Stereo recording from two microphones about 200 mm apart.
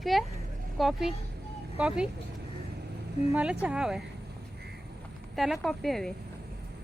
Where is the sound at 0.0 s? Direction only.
Centre (ahead or behind).